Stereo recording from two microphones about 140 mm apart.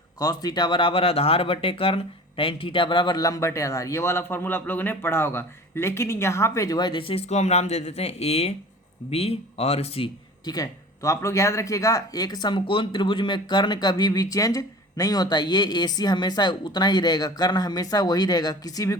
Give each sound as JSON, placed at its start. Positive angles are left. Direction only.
{"t": 0.2, "sound": "speech", "side_deg": 30}
{"t": 10.4, "sound": "speech", "side_deg": 25}